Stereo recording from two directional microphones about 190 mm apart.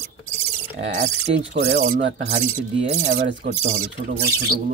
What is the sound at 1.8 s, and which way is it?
Speech, 45° right (ahead or behind).